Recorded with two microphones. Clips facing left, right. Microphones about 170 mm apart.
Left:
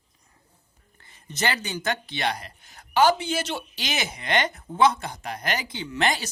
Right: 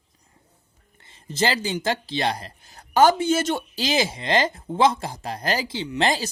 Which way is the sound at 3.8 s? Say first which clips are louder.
Right 8 dB; 30° right (ahead or behind).